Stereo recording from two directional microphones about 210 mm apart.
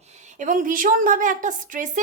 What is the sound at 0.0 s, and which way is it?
A woman's voice, 35° right (ahead or behind).